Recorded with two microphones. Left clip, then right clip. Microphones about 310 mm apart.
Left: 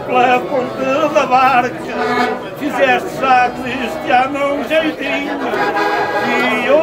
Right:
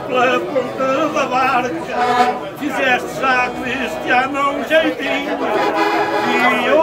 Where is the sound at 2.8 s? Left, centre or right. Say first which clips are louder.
Left 3 dB; centre.